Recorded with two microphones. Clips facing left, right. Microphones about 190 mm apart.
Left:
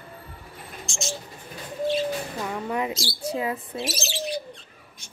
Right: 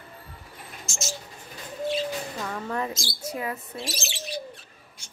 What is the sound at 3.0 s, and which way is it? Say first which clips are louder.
Speech: left 4 dB; 30° left (ahead or behind).